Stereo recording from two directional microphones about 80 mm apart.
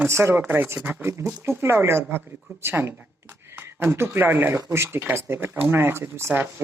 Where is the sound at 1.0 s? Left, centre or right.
Right.